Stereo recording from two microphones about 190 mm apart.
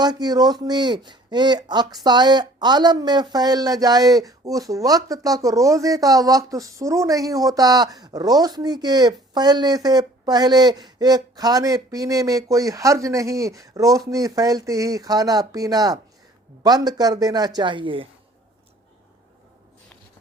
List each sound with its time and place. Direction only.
0.0 s speech: 20° right (ahead or behind)